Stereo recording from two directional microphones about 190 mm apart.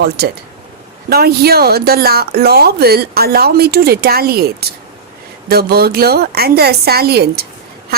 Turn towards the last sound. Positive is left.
turn(degrees=-55)  # may be behind; listen again after turning